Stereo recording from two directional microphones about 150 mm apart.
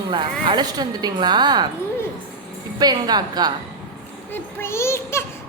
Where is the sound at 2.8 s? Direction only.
30° right (ahead or behind).